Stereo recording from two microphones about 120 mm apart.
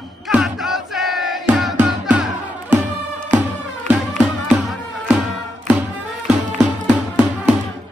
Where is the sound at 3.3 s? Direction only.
10° right (ahead or behind).